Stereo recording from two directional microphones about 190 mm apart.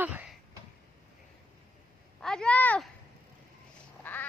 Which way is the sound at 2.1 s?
5° left (ahead or behind).